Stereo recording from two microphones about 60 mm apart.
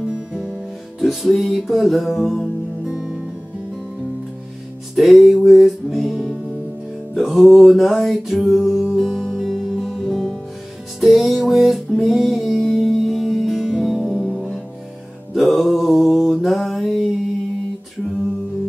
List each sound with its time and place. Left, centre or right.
0.0 s music: centre
0.9 s music: centre
2.8 s music: centre
4.9 s music: centre
15.3 s mantra: centre